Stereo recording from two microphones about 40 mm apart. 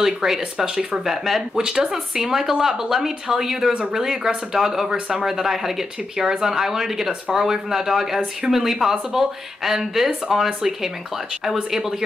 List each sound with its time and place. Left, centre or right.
0.0 s speech: centre
5.2 s speech: centre